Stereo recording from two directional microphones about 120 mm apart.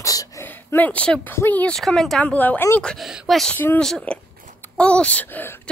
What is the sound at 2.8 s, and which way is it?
Speech, 5° left (ahead or behind).